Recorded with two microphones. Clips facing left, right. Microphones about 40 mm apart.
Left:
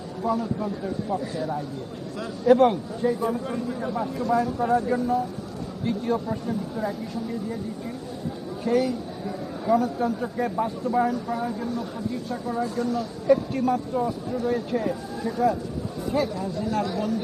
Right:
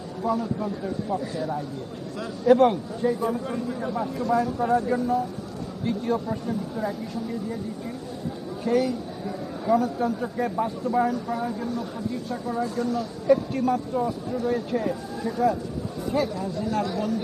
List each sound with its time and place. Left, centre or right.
0.2 s a man's voice: centre
8.6 s a man's voice: centre